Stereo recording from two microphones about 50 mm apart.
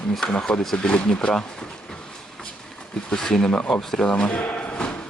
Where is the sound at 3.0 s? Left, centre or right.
Centre.